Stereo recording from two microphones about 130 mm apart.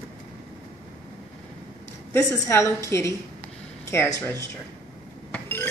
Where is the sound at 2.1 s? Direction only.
20° left (ahead or behind).